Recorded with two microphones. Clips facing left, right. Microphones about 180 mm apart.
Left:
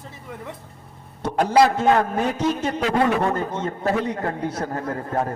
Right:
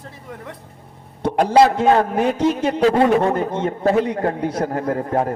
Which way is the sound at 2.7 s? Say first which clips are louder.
Right 7 dB; 25° right (ahead or behind).